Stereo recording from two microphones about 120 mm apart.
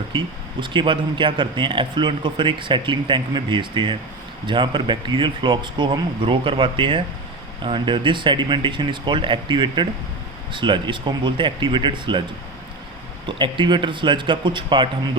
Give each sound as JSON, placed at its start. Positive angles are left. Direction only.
{"t": 0.1, "sound": "speech", "side_deg": -40}
{"t": 13.2, "sound": "speech", "side_deg": -40}